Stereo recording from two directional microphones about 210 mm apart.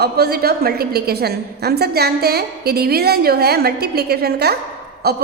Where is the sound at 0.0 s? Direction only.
50° right (ahead or behind).